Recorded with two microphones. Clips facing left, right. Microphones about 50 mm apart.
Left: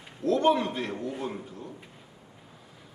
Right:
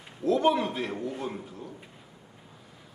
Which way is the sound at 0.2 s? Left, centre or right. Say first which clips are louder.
Even; centre.